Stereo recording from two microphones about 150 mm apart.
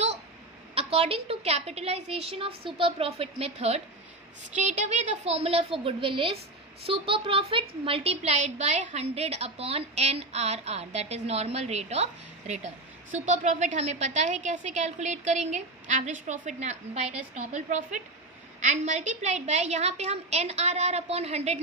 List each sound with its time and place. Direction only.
0.7 s a woman's voice: 40° right (ahead or behind)